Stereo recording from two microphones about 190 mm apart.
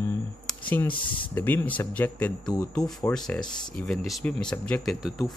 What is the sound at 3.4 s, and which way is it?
Speech, 20° left (ahead or behind).